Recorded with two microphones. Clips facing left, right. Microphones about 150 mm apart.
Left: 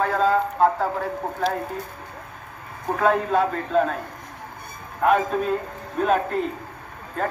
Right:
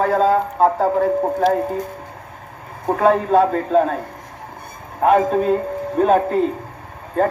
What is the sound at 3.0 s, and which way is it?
Speech, 35° right (ahead or behind).